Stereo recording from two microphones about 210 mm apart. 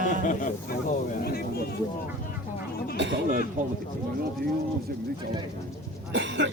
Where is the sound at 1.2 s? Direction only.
45° left (ahead or behind).